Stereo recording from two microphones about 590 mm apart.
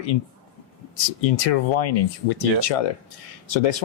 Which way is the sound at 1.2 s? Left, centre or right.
Left.